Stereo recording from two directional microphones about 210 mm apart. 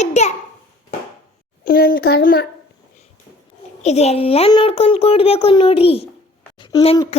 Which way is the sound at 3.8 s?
30° left (ahead or behind).